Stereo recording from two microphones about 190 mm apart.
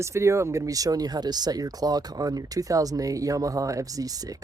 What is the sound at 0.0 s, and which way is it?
Speech, 15° right (ahead or behind).